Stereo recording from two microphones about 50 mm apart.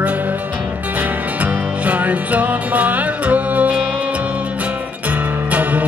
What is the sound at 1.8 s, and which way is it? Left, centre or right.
Music, right.